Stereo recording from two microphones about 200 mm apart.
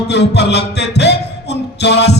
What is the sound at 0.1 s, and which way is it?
Music, 60° left (ahead or behind).